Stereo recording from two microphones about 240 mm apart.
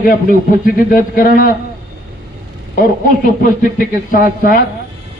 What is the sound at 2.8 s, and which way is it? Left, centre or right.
A man's voice, left.